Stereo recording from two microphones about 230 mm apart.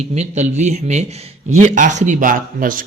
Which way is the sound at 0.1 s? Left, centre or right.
Right.